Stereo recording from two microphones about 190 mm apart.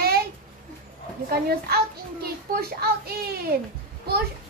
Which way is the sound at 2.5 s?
55° right (ahead or behind).